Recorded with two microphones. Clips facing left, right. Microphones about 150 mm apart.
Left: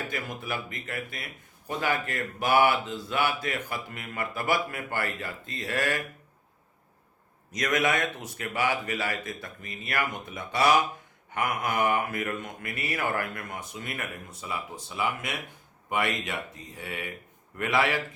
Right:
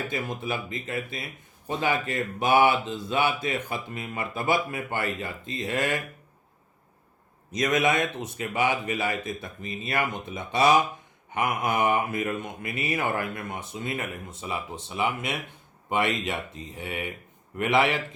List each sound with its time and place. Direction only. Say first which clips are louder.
0.1 s speech: right 3 dB; 20° right (ahead or behind)
7.5 s speech: right 3 dB; 25° right (ahead or behind)